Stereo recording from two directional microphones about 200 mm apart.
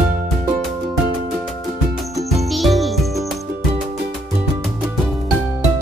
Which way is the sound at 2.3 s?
Centre (ahead or behind).